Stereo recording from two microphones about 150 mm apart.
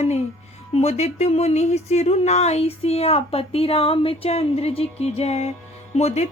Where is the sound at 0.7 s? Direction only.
45° left (ahead or behind).